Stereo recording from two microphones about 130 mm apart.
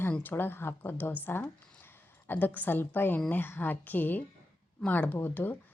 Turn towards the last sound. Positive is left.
turn(degrees=15)  # may be behind; listen again after turning